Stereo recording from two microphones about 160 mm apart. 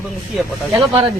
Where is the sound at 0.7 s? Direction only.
35° right (ahead or behind).